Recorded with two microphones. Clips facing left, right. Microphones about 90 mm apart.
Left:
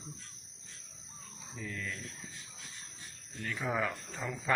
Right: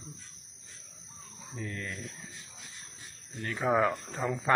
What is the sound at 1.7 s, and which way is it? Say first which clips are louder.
Speech: right 2 dB; 5° right (ahead or behind).